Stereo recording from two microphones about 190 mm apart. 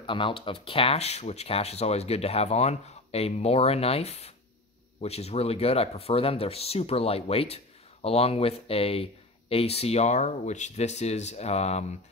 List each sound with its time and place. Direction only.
0.0 s speech: 25° left (ahead or behind)